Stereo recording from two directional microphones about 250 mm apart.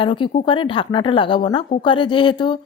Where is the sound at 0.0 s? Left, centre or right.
Centre.